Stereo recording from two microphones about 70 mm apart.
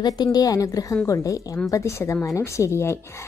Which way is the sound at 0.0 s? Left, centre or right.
Left.